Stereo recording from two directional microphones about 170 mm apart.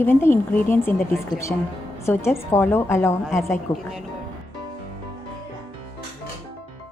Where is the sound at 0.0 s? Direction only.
15° left (ahead or behind).